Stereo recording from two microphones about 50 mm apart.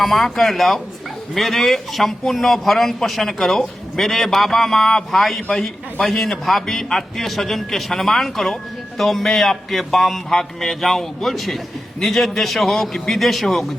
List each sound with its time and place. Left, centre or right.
0.0 s speech: centre
5.4 s a man's voice: centre
5.6 s speech: centre